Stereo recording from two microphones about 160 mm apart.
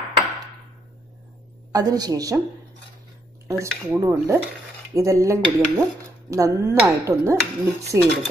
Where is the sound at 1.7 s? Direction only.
25° right (ahead or behind).